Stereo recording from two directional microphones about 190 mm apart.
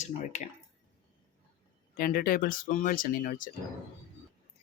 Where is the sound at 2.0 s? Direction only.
50° left (ahead or behind).